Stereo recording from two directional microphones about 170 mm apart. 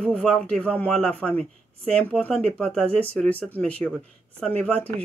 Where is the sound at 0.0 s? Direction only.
5° left (ahead or behind).